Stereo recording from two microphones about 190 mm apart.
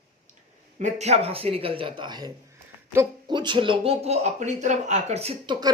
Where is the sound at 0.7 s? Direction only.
35° right (ahead or behind).